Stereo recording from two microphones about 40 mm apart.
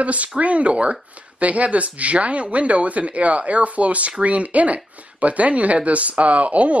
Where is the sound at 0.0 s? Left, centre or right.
Right.